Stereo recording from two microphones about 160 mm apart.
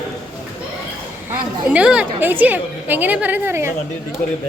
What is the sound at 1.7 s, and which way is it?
A woman's voice, 5° right (ahead or behind).